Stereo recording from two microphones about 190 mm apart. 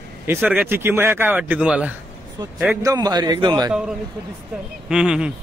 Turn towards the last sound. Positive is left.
turn(degrees=-5)  # may be behind; listen again after turning